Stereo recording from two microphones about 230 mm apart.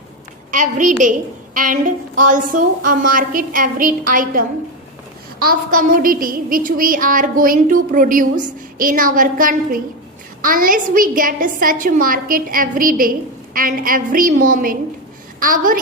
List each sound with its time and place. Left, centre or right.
0.5 s child singing: right